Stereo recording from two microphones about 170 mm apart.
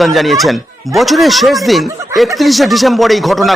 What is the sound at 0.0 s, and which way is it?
Speech, centre (ahead or behind).